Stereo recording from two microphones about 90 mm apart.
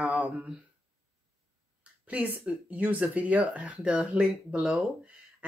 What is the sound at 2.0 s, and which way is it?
Speech, 20° right (ahead or behind).